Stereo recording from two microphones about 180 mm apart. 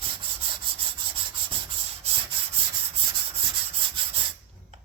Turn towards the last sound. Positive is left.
turn(degrees=-30)  # may be behind; listen again after turning